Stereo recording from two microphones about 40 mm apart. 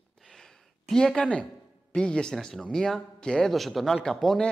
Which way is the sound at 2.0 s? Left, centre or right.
Left.